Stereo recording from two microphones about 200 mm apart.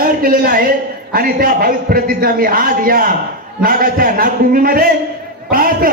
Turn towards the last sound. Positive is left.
turn(degrees=-45)  # may be behind; listen again after turning